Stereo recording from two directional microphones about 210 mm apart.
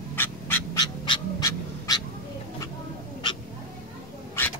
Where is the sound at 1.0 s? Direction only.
20° left (ahead or behind).